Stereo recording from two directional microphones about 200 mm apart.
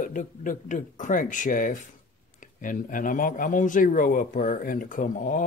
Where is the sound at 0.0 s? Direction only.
40° left (ahead or behind).